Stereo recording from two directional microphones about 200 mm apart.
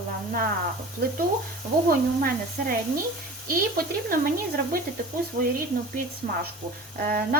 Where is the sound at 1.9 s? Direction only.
45° right (ahead or behind).